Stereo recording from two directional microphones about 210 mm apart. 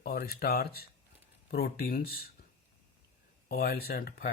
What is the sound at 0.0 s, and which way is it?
Speech, 45° left (ahead or behind).